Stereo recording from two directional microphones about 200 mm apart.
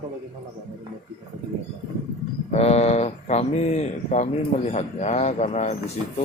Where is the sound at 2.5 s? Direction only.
30° left (ahead or behind).